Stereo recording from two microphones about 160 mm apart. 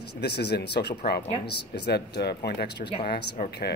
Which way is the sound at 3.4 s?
65° left (ahead or behind).